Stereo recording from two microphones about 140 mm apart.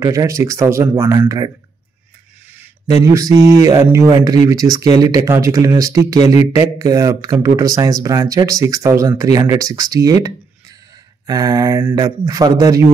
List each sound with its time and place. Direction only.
0.0 s speech: 20° right (ahead or behind)
3.1 s speech: 25° right (ahead or behind)